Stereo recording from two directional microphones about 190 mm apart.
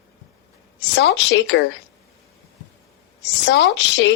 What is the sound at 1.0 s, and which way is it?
Speech, 65° left (ahead or behind).